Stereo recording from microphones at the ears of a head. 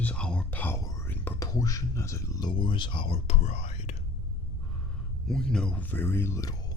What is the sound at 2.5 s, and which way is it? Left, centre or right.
Speech, left.